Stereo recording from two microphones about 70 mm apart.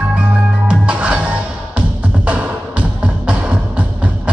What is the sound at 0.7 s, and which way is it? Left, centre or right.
Music, centre.